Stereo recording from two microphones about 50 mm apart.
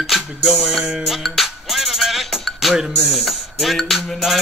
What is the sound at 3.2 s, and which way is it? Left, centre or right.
Speech, centre.